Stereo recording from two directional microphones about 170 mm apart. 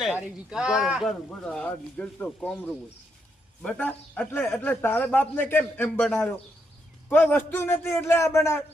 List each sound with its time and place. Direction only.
0.5 s speech: 5° right (ahead or behind)
1.5 s a man's voice: 5° left (ahead or behind)